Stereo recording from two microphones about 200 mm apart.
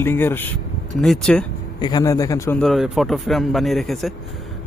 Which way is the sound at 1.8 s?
20° left (ahead or behind).